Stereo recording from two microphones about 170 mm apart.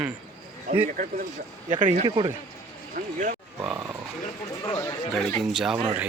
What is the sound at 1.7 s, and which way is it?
Speech, 35° right (ahead or behind).